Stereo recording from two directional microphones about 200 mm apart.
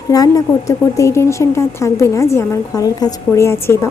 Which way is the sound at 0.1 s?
20° left (ahead or behind).